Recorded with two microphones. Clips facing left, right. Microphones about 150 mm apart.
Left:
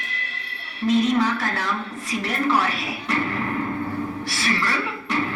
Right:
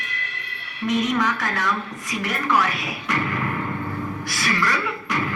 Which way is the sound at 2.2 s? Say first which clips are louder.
Even; 30° left (ahead or behind).